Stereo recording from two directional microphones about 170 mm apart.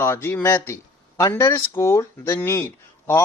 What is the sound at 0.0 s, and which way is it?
Speech, 15° left (ahead or behind).